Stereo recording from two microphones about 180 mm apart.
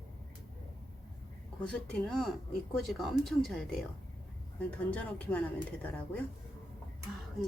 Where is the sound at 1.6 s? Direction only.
5° left (ahead or behind).